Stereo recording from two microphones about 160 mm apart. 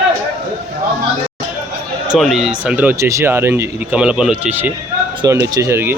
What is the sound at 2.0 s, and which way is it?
Speech, centre (ahead or behind).